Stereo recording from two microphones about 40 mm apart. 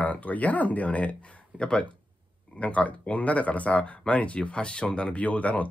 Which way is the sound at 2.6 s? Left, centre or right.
Left.